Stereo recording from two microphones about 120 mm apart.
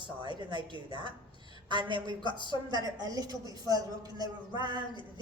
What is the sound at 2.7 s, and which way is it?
A woman's voice, 35° right (ahead or behind).